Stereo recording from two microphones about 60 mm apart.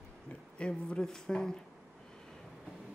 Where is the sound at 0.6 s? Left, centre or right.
Centre.